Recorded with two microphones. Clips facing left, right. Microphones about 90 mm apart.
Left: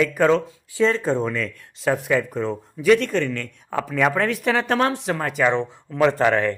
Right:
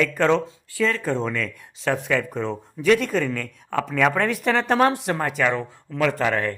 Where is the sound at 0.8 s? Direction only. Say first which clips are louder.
Left 3 dB; 25° left (ahead or behind).